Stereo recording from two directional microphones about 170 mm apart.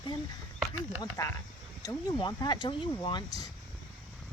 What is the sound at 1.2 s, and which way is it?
Speech, 20° left (ahead or behind).